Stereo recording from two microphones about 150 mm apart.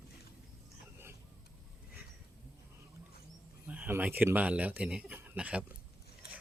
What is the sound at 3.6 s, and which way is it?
Speech, 10° right (ahead or behind).